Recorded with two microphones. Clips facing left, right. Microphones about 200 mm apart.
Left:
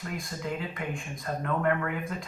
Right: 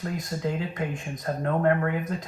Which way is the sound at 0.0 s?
45° right (ahead or behind).